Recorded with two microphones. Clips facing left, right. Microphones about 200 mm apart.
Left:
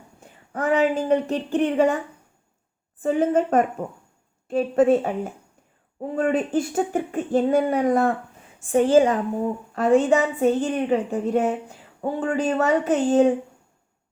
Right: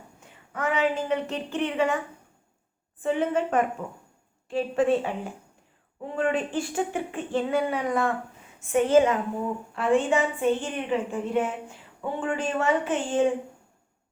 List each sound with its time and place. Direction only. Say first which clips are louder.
0.2 s a woman's voice: left 4 dB; 35° left (ahead or behind)
3.0 s a woman's voice: left 5 dB; 40° left (ahead or behind)